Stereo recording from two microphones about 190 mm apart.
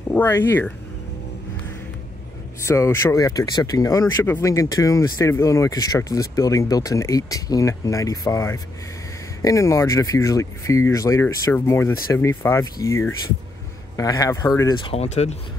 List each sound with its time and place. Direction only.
0.1 s speech: 10° left (ahead or behind)
2.6 s speech: 15° left (ahead or behind)
14.8 s speech: 30° left (ahead or behind)